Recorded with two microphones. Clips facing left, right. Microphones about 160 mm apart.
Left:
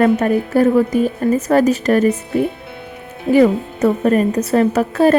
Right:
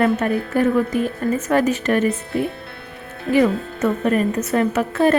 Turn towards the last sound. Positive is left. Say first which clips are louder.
# left 4 dB
turn(degrees=40)  # may be behind; listen again after turning